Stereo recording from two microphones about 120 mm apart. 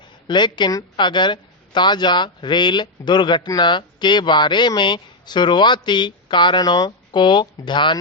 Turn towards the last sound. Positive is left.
turn(degrees=40)  # may be behind; listen again after turning